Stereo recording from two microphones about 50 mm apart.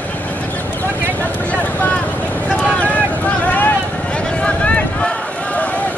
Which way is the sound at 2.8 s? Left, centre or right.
Left.